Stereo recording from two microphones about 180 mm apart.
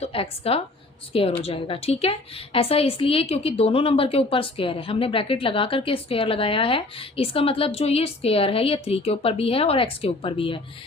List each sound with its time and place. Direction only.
0.0 s a woman's voice: 30° left (ahead or behind)